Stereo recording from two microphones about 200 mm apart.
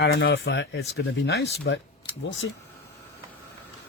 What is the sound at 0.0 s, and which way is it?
Speech, 65° left (ahead or behind).